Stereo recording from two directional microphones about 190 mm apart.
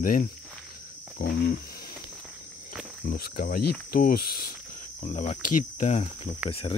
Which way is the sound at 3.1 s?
50° left (ahead or behind).